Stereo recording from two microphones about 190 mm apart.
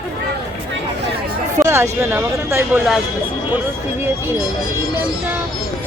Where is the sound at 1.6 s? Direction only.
15° right (ahead or behind).